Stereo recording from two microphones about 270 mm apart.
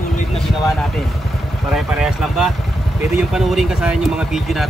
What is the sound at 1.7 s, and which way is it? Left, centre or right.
Speech, centre.